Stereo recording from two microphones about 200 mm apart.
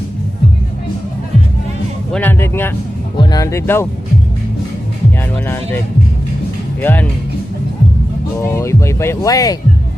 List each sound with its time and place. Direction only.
2.1 s speech: 10° left (ahead or behind)
6.8 s speech: 10° left (ahead or behind)
8.4 s speech: 15° left (ahead or behind)